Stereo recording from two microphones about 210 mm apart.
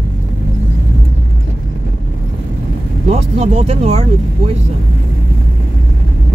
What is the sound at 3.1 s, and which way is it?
Speech, 30° right (ahead or behind).